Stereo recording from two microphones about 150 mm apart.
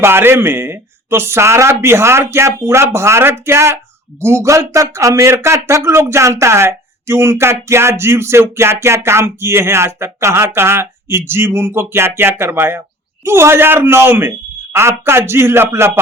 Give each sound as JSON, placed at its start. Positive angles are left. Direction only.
{"t": 0.0, "sound": "speech", "side_deg": -15}